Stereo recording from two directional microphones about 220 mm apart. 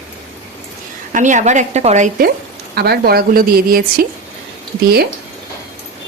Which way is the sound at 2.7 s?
45° right (ahead or behind).